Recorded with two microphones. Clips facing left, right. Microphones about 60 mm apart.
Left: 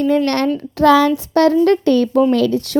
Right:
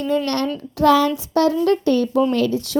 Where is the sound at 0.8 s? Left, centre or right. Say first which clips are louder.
Left 3 dB; left.